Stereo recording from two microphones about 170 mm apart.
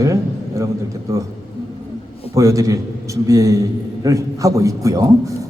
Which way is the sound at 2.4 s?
20° right (ahead or behind).